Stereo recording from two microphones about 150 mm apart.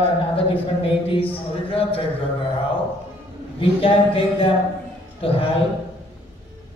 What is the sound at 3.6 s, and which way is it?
Speech, 40° left (ahead or behind).